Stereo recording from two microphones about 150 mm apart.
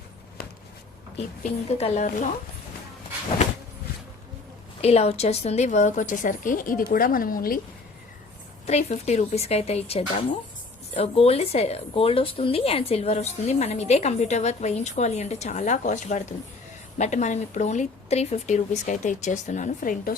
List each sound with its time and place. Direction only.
1.5 s a woman's voice: 50° left (ahead or behind)
4.8 s speech: 45° left (ahead or behind); by 7.6 s 70° left (ahead or behind)
8.6 s a woman's voice: 50° left (ahead or behind)